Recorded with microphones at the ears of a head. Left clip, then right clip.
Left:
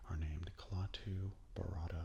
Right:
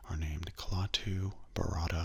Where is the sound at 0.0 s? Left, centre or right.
Right.